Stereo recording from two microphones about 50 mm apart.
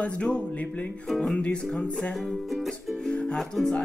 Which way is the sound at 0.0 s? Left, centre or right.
Left.